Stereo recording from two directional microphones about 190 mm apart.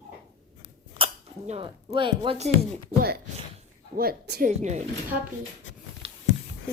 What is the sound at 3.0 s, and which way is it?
A woman's voice, 55° right (ahead or behind).